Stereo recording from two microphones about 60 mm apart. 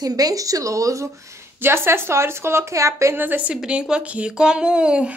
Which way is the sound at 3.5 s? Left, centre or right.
Centre.